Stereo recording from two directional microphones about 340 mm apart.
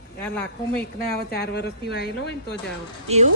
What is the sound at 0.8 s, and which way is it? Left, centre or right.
Speech, left.